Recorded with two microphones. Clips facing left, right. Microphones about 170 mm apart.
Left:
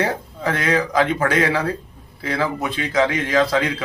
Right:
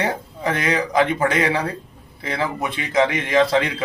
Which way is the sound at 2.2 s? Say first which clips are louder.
Left 2 dB; 20° right (ahead or behind).